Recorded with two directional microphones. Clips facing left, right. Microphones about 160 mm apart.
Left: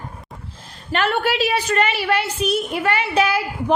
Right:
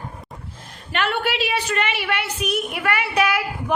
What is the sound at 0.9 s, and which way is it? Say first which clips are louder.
A woman's voice: left 3 dB; 40° left (ahead or behind).